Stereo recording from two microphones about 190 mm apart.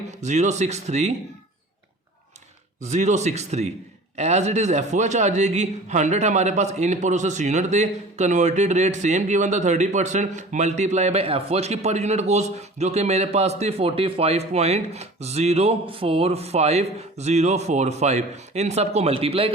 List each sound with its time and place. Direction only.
0.2 s a man's voice: 40° right (ahead or behind)
2.8 s a man's voice: 40° right (ahead or behind)